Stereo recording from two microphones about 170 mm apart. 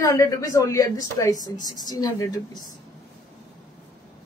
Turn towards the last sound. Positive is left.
turn(degrees=25)  # may be behind; listen again after turning